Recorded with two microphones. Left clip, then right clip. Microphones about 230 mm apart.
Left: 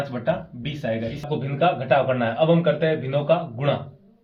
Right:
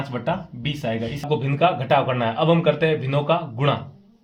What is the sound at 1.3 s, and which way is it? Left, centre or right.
Speech, right.